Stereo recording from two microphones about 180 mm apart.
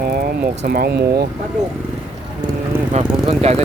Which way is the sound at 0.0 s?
55° right (ahead or behind).